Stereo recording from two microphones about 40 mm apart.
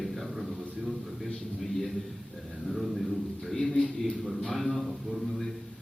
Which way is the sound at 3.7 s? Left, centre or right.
Left.